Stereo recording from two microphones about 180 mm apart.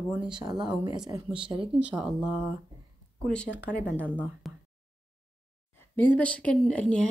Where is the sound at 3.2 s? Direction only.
5° left (ahead or behind).